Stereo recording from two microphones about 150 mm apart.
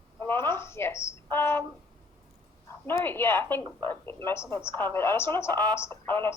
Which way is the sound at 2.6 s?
15° left (ahead or behind).